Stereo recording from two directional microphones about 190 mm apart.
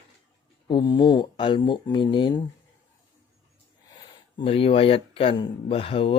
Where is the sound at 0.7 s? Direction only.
25° left (ahead or behind).